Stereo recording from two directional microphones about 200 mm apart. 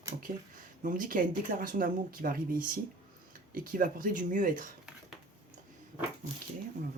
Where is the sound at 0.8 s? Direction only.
40° right (ahead or behind).